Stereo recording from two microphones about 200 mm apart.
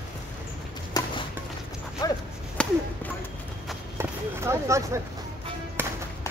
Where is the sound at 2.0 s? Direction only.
20° left (ahead or behind).